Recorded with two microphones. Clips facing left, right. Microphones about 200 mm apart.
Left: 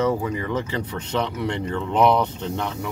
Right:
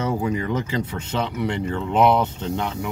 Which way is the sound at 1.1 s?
10° right (ahead or behind).